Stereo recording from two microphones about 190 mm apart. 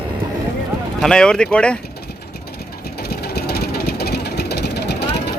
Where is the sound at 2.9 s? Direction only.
55° left (ahead or behind).